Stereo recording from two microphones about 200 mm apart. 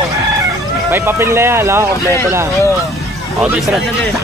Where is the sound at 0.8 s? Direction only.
10° right (ahead or behind).